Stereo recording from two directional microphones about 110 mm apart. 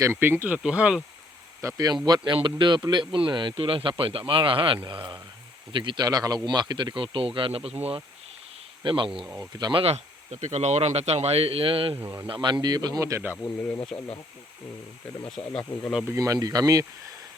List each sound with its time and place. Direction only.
0.0 s speech: 20° right (ahead or behind)
1.6 s speech: 35° right (ahead or behind); by 7.8 s 60° right (ahead or behind)
8.8 s speech: 50° right (ahead or behind)
9.8 s speech: 80° right; by 11.9 s 55° right (ahead or behind)
12.3 s speech: 45° right (ahead or behind)
13.3 s speech: 15° left (ahead or behind)
15.4 s speech: 15° left (ahead or behind)
16.0 s speech: 30° right (ahead or behind)